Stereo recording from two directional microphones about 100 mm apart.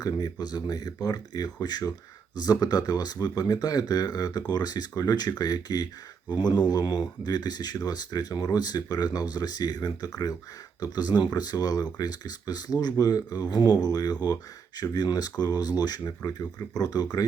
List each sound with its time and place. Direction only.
0.0 s speech: 40° left (ahead or behind)